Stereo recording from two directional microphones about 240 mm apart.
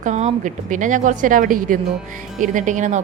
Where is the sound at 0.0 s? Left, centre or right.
Right.